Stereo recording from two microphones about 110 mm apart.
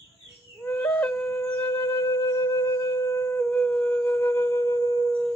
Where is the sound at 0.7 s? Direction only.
15° left (ahead or behind).